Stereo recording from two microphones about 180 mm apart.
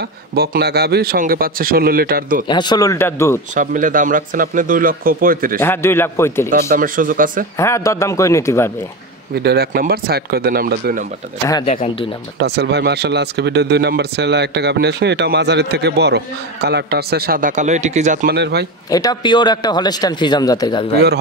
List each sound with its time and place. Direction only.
0.3 s a man's voice: 60° right (ahead or behind)
2.4 s a man's voice: 25° left (ahead or behind)
3.5 s a man's voice: 45° right (ahead or behind)
5.6 s a man's voice: 15° left (ahead or behind)
6.7 s a man's voice: 50° right (ahead or behind)
7.5 s a man's voice: 15° left (ahead or behind)
9.3 s a man's voice: 65° right (ahead or behind)
11.7 s speech: 35° left (ahead or behind)
12.4 s a man's voice: 65° right (ahead or behind); by 18.2 s 40° right (ahead or behind)
18.2 s speech: 65° right (ahead or behind)
18.9 s a man's voice: 20° left (ahead or behind)